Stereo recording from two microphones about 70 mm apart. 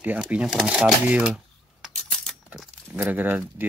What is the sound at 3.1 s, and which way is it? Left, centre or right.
Speech, right.